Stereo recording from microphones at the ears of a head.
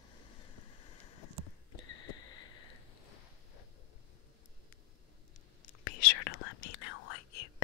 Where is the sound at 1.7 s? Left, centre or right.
Left.